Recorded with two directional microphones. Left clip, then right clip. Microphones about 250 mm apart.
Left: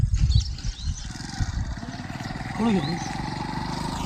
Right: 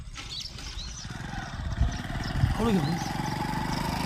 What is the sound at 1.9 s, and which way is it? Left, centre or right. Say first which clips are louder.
Vehicle: left 1 dB; centre.